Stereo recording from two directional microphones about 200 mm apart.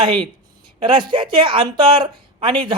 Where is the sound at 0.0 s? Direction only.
25° right (ahead or behind).